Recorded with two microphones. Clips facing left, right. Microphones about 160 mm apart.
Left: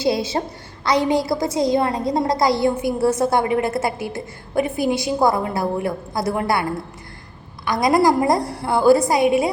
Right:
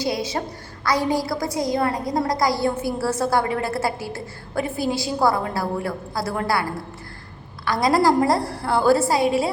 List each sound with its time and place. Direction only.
0.0 s a woman's voice: 25° left (ahead or behind)